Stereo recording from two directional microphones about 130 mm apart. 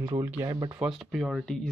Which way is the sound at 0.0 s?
30° right (ahead or behind).